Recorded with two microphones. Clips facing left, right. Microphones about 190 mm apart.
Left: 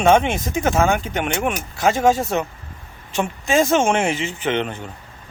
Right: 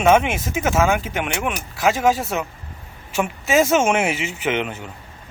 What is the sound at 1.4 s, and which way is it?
Speech, 35° left (ahead or behind).